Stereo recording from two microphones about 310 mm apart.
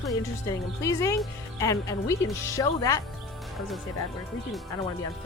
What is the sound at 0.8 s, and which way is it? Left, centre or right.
Speech, centre.